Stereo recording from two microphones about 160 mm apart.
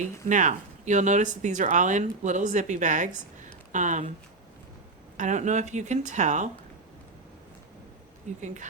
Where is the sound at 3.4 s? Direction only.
50° right (ahead or behind).